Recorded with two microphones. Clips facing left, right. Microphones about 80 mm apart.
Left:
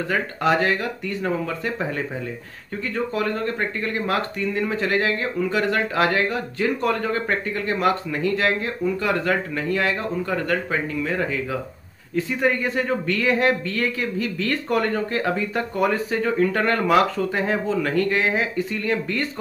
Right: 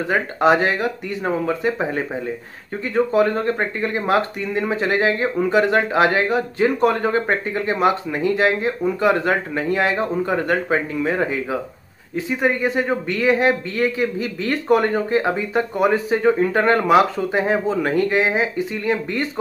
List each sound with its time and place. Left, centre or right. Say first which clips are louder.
0.1 s speech: right 5 dB; right